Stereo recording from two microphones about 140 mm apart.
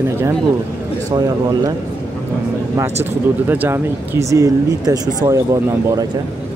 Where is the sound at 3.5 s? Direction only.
15° right (ahead or behind).